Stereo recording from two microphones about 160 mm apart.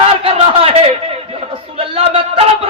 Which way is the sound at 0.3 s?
40° right (ahead or behind).